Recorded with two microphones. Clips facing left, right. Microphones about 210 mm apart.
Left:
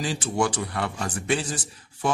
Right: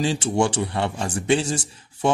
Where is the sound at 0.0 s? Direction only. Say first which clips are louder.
Right 4 dB; 25° right (ahead or behind).